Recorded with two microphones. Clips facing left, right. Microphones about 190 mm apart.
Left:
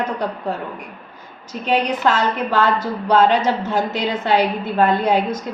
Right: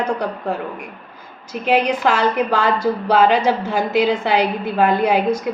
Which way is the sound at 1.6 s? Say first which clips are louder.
Right 1 dB; 10° right (ahead or behind).